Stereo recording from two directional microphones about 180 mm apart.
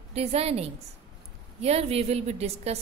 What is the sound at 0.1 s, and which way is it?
A woman's voice, 35° right (ahead or behind).